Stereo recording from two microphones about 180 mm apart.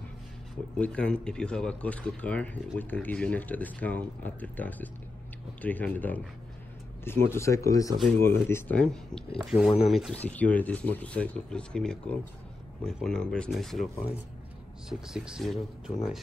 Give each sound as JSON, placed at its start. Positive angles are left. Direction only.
{"t": 0.7, "sound": "speech", "side_deg": 5}
{"t": 14.9, "sound": "speech", "side_deg": -5}